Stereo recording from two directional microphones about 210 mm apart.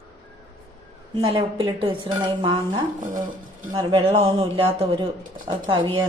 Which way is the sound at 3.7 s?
25° right (ahead or behind).